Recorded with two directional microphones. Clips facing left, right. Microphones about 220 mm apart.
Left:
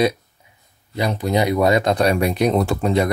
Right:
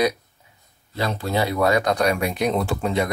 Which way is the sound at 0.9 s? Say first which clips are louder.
Left 4 dB; 15° left (ahead or behind).